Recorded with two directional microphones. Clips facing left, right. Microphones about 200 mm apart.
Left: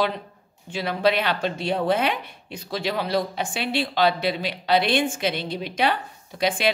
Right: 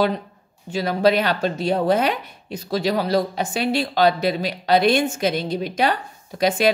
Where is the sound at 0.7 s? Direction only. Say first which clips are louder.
Right 4 dB; 40° right (ahead or behind).